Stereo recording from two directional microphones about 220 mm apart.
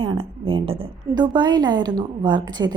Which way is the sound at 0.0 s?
25° right (ahead or behind).